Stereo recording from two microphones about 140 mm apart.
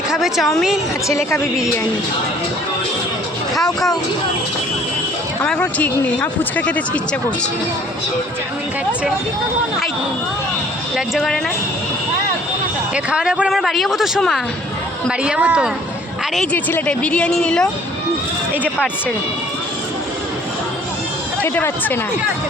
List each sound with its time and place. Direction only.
0.1 s a man's voice: centre (ahead or behind)
1.0 s a woman's voice: 20° left (ahead or behind)
3.5 s speech: centre (ahead or behind)
5.4 s a woman's voice: 10° left (ahead or behind)
10.9 s a man's voice: centre (ahead or behind)
12.9 s a man's voice: 5° right (ahead or behind)
15.2 s a woman's voice: 10° right (ahead or behind)
16.3 s a man's voice: 5° left (ahead or behind)
21.4 s a woman's voice: 15° left (ahead or behind)